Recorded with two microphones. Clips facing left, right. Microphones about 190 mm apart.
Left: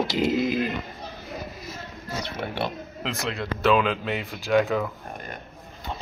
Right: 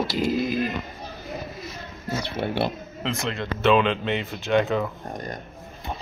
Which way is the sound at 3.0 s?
Centre (ahead or behind).